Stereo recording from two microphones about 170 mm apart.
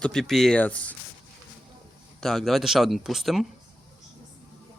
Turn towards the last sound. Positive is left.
turn(degrees=0)  # may be behind; listen again after turning